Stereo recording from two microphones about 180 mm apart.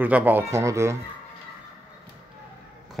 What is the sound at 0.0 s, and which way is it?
Speech, 10° right (ahead or behind).